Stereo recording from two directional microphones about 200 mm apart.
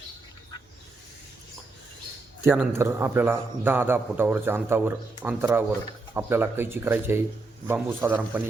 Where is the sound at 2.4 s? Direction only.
10° right (ahead or behind).